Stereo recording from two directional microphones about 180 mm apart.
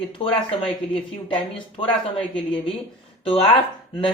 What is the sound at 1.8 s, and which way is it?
Speech, 30° left (ahead or behind).